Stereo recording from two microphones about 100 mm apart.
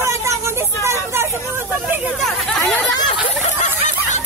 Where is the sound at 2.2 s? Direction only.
5° left (ahead or behind).